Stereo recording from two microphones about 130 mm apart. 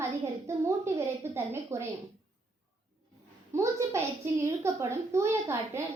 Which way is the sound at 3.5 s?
20° right (ahead or behind).